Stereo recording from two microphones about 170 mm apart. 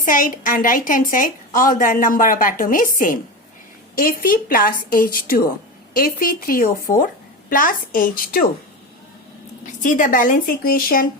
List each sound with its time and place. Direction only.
0.0 s a woman's voice: 50° left (ahead or behind)
9.8 s a woman's voice: 50° left (ahead or behind)